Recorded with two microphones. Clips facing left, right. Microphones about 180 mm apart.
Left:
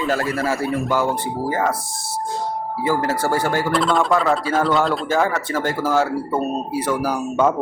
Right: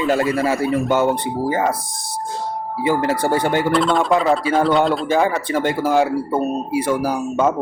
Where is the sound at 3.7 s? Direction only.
Centre (ahead or behind).